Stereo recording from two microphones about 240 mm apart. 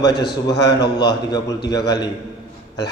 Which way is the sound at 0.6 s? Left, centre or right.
Left.